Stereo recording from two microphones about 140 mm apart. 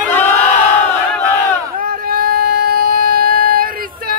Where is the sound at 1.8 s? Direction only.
90° right.